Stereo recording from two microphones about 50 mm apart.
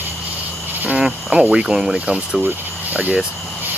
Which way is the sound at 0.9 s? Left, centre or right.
Centre.